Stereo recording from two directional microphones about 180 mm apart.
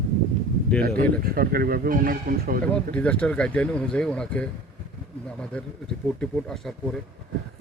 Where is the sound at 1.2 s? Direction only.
55° right (ahead or behind).